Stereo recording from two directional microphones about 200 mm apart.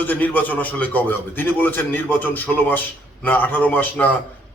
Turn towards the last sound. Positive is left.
turn(degrees=10)  # may be behind; listen again after turning